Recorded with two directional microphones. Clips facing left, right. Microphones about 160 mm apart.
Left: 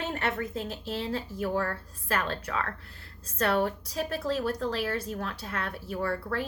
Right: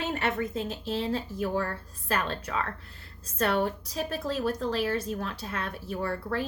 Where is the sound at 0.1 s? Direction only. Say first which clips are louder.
Right 2 dB; 20° right (ahead or behind).